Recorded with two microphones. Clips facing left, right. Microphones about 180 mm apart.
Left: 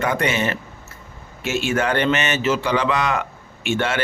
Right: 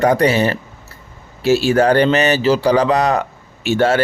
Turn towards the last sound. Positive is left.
turn(degrees=-40)  # may be behind; listen again after turning